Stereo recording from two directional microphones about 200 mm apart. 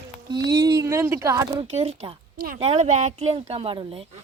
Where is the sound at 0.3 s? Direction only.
20° right (ahead or behind).